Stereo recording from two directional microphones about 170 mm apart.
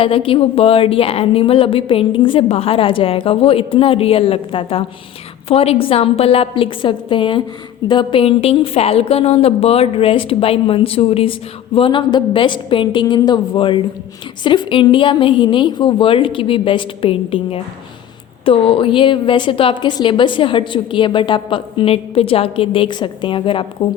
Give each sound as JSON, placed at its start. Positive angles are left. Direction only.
{"t": 0.0, "sound": "a woman's voice", "side_deg": 30}